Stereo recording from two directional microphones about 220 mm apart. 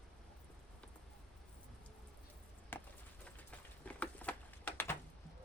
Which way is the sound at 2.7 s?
10° left (ahead or behind).